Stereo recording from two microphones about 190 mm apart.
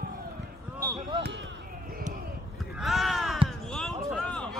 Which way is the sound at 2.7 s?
Centre (ahead or behind).